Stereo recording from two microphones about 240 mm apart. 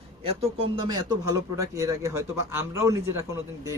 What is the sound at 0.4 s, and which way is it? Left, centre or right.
Speech, right.